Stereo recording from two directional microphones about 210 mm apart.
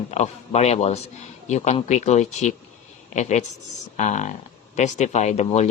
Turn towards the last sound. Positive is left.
turn(degrees=30)  # may be behind; listen again after turning